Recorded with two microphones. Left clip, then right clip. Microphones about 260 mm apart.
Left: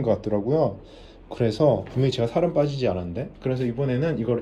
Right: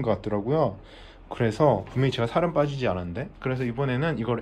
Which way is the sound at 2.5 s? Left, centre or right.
Centre.